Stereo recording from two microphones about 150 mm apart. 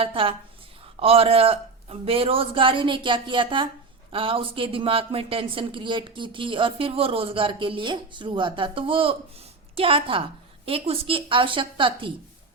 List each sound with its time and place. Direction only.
0.0 s speech: 35° right (ahead or behind)